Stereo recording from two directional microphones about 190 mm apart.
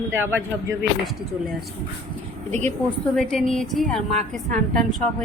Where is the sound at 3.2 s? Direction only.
Centre (ahead or behind).